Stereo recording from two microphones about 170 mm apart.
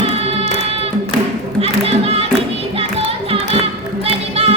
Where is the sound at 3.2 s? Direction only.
35° right (ahead or behind).